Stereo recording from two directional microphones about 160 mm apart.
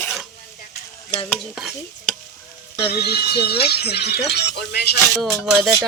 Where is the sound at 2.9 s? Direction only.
80° left.